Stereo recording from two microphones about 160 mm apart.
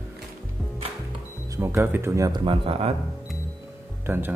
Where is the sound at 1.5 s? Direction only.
15° right (ahead or behind); by 2.9 s 30° right (ahead or behind).